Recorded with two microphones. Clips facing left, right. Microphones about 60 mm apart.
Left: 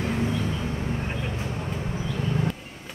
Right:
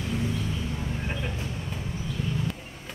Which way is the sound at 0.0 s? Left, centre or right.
Left.